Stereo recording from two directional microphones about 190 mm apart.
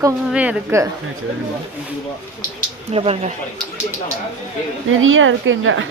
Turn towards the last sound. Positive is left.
turn(degrees=-90)